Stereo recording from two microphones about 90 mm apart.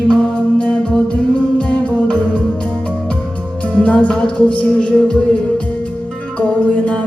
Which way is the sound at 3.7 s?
15° left (ahead or behind).